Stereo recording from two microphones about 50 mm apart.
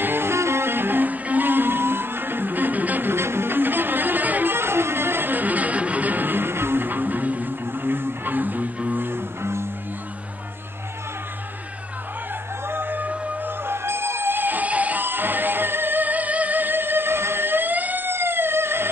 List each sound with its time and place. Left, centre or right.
0.0 s music: right
3.1 s music: right
4.6 s music: right
7.6 s music: right
12.6 s music: right
13.7 s music: right